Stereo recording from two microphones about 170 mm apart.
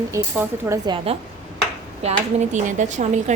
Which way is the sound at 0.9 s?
30° right (ahead or behind).